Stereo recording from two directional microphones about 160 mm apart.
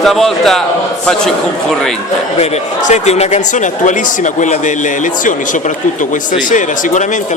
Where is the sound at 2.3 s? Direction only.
45° left (ahead or behind).